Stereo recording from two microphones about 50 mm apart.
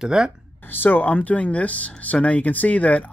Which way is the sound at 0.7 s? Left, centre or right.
Left.